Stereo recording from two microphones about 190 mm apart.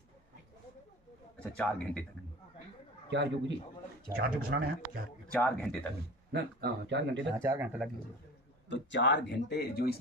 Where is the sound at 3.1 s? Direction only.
70° right (ahead or behind).